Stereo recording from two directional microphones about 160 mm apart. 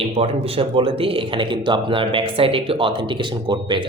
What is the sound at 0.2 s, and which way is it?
Speech, 35° right (ahead or behind).